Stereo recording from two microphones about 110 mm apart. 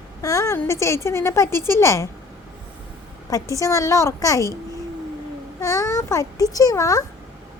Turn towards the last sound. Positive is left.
turn(degrees=30)  # may be behind; listen again after turning